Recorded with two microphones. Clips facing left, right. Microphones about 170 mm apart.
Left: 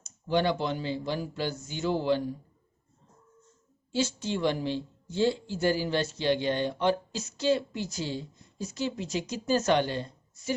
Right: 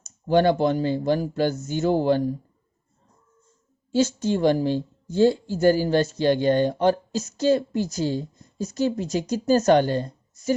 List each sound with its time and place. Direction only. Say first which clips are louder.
0.0 s a woman's voice: right 8 dB; 45° right (ahead or behind)
3.9 s a woman's voice: right 8 dB; 45° right (ahead or behind)